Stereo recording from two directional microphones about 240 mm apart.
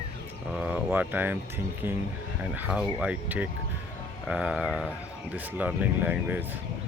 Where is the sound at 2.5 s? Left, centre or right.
Centre.